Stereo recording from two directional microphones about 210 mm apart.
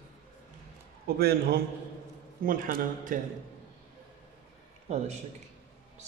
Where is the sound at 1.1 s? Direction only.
50° right (ahead or behind).